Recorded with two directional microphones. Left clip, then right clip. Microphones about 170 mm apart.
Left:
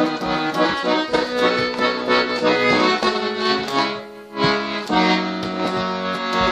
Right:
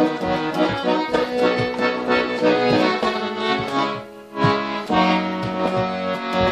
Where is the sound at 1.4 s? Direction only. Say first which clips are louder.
Left 1 dB; 10° left (ahead or behind).